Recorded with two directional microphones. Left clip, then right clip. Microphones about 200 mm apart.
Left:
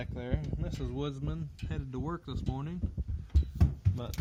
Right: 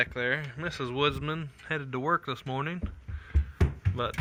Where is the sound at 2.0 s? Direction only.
35° right (ahead or behind).